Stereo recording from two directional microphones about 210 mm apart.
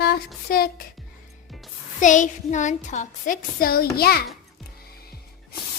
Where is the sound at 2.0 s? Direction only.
35° left (ahead or behind).